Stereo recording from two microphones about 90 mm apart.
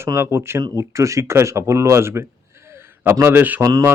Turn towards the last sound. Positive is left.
turn(degrees=-40)  # may be behind; listen again after turning